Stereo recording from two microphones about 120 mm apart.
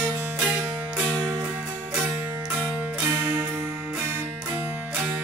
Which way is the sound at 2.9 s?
15° right (ahead or behind).